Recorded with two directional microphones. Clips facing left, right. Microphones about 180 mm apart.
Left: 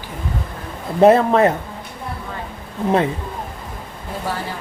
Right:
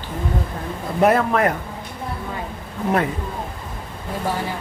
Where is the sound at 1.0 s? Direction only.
25° left (ahead or behind).